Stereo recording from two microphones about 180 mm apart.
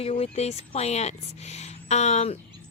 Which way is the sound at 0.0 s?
35° left (ahead or behind).